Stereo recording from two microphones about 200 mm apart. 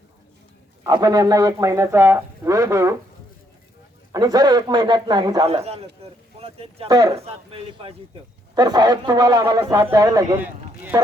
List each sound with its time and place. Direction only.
0.9 s a man's voice: 20° right (ahead or behind)
4.1 s speech: 20° right (ahead or behind)
5.5 s speech: 30° right (ahead or behind)
7.2 s a man's voice: 30° right (ahead or behind); by 11.0 s 15° right (ahead or behind)